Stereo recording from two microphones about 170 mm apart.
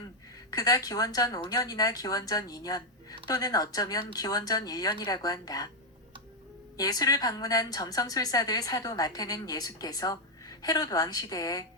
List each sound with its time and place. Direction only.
0.5 s a woman's voice: 20° left (ahead or behind)
6.7 s a woman's voice: 20° left (ahead or behind)